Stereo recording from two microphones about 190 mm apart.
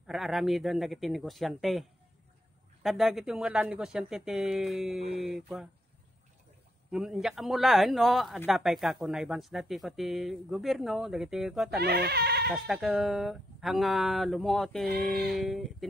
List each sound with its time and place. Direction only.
0.0 s speech: centre (ahead or behind)
6.9 s speech: centre (ahead or behind)
11.8 s speech: 55° right (ahead or behind)
12.6 s speech: centre (ahead or behind)